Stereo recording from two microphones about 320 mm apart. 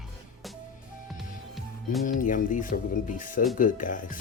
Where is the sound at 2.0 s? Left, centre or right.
Left.